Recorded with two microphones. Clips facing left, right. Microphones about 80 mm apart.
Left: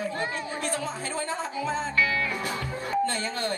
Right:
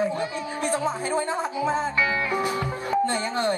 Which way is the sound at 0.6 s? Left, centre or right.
Right.